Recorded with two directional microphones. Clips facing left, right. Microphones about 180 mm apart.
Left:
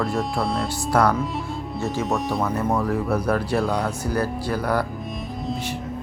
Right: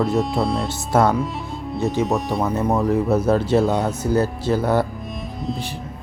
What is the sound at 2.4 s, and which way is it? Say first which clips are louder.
Speech: right 3 dB; 20° right (ahead or behind).